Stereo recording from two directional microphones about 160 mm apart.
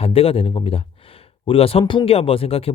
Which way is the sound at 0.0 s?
35° left (ahead or behind).